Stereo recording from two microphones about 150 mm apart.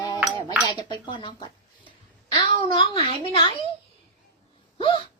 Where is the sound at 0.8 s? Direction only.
30° left (ahead or behind).